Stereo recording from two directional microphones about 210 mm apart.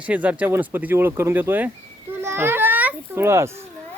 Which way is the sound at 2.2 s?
10° right (ahead or behind).